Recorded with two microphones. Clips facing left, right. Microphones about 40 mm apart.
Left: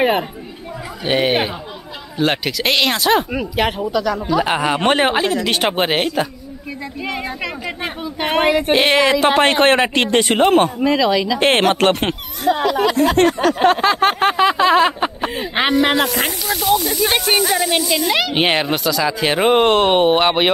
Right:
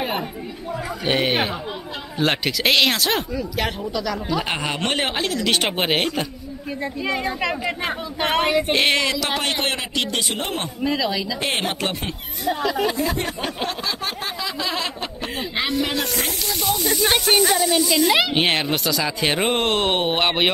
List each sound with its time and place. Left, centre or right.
1.0 s speech: centre
3.5 s speech: centre
9.1 s a man's voice: left
13.6 s a sound: left
15.8 s speech: left
16.5 s speech: centre